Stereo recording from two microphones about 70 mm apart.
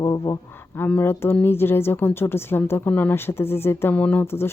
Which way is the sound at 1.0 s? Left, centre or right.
Left.